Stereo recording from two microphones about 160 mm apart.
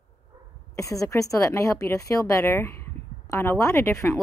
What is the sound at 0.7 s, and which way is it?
A woman's voice, 20° left (ahead or behind).